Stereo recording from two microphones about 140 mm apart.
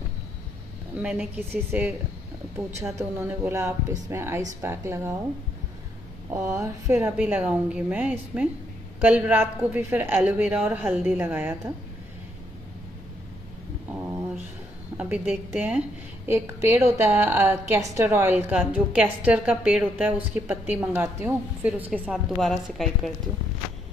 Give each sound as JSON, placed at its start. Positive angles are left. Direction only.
{"t": 1.0, "sound": "a woman's voice", "side_deg": -15}
{"t": 3.0, "sound": "speech", "side_deg": -20}
{"t": 6.5, "sound": "speech", "side_deg": -20}
{"t": 7.0, "sound": "a woman's voice", "side_deg": -10}
{"t": 13.9, "sound": "a sound", "side_deg": -15}
{"t": 15.0, "sound": "a woman's voice", "side_deg": -10}